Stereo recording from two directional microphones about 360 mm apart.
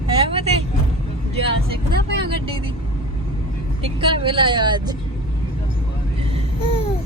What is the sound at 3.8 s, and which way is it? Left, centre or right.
Speech, centre.